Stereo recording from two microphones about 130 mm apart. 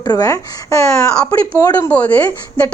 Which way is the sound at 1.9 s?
10° left (ahead or behind).